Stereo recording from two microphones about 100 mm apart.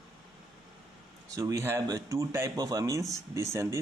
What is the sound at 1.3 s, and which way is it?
Speech, 35° right (ahead or behind).